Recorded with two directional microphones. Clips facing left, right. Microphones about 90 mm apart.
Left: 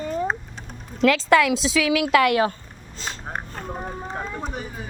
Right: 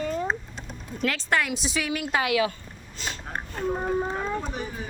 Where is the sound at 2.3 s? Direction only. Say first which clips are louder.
Left 3 dB; 40° left (ahead or behind).